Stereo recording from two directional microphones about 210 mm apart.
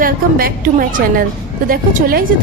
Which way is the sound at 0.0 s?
45° right (ahead or behind).